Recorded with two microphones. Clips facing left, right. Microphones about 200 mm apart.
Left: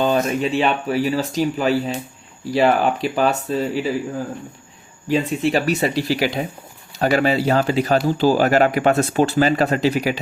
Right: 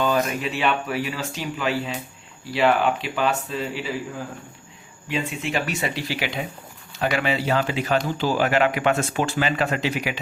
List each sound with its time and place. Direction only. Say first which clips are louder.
0.0 s speech: left 4 dB; 30° left (ahead or behind)
5.0 s speech: left 8 dB; 40° left (ahead or behind)